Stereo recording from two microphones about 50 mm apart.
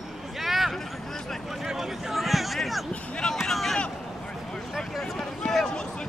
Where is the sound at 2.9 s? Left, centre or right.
Left.